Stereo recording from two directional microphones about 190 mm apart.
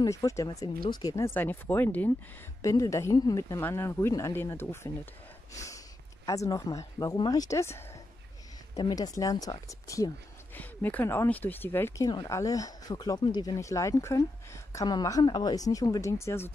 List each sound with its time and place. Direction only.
0.0 s speech: 20° left (ahead or behind)
5.5 s a sound: 15° left (ahead or behind)
6.2 s speech: 15° left (ahead or behind)